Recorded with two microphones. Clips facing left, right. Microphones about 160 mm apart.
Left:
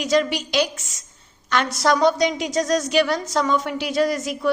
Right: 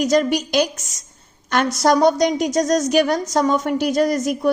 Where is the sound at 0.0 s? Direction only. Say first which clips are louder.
Right 3 dB; 45° right (ahead or behind).